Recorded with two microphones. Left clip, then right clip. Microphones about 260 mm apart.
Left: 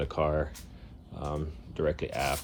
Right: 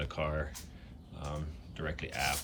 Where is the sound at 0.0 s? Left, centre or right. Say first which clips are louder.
Left 7 dB; centre.